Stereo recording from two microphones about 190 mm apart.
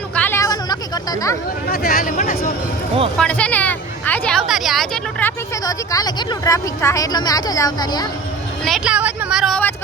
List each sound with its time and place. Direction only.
0.2 s a sound: 15° left (ahead or behind)
1.7 s speech: 50° left (ahead or behind)
3.2 s a woman's voice: 5° left (ahead or behind)
5.2 s a woman's voice: 20° left (ahead or behind)
8.6 s a woman's voice: centre (ahead or behind)